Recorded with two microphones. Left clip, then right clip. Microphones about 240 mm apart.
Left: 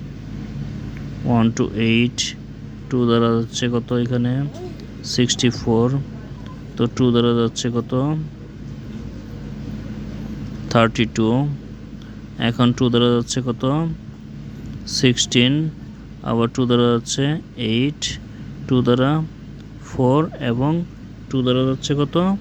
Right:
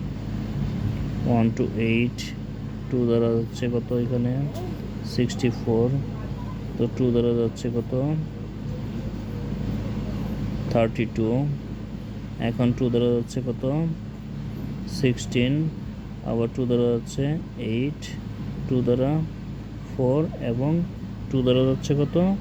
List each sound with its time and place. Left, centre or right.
1.3 s speech: left
6.7 s speech: left
10.7 s speech: left
14.8 s speech: left
21.3 s speech: centre